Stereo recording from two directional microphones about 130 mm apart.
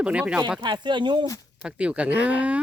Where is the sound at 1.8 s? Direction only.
10° right (ahead or behind).